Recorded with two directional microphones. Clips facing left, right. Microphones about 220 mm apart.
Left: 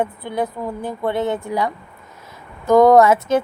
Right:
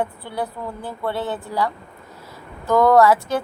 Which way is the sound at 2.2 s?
20° left (ahead or behind).